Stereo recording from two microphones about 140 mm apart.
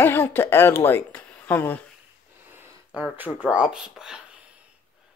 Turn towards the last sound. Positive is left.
turn(degrees=-5)  # may be behind; listen again after turning